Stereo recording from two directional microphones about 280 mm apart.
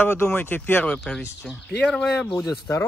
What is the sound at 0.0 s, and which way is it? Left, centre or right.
Speech, centre.